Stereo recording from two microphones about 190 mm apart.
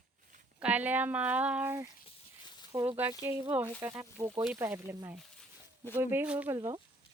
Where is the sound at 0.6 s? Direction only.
10° right (ahead or behind).